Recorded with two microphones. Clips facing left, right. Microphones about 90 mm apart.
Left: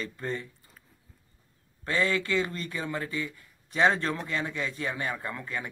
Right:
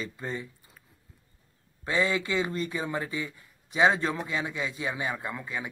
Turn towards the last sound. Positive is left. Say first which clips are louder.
# even
turn(degrees=-10)  # may be behind; listen again after turning